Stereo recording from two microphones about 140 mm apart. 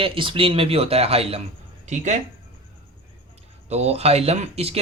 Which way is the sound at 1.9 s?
55° right (ahead or behind).